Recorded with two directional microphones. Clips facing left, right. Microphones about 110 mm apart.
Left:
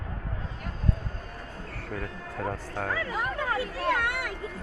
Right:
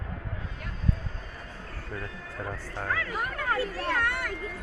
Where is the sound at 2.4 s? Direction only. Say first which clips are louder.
Left 4 dB; 90° left.